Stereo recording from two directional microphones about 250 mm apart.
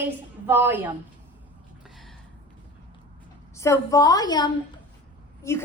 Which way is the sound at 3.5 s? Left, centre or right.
Centre.